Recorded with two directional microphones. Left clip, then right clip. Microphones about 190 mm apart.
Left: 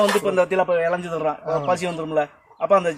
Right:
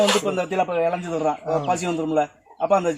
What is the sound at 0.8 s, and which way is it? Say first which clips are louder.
Speech: even; 10° left (ahead or behind).